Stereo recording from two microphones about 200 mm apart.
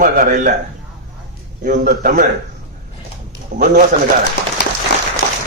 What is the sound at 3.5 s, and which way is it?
Speech, 45° right (ahead or behind).